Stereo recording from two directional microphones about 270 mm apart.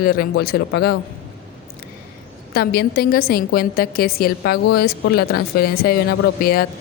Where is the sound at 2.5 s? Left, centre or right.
Left.